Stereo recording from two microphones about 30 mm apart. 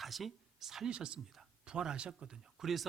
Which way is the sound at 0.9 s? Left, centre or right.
Right.